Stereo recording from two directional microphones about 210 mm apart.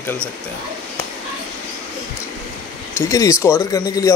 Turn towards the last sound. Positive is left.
turn(degrees=15)  # may be behind; listen again after turning